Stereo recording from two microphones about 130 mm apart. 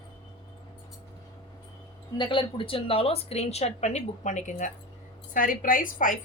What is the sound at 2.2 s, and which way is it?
A woman's voice, 40° left (ahead or behind).